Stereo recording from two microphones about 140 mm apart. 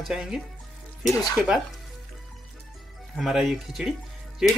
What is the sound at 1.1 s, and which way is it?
Speech, 25° left (ahead or behind).